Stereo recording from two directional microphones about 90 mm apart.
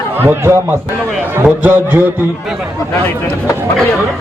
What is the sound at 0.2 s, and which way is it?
A man's voice, 25° right (ahead or behind).